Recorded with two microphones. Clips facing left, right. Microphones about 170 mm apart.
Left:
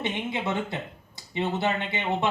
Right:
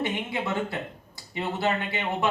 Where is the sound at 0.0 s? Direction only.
20° left (ahead or behind).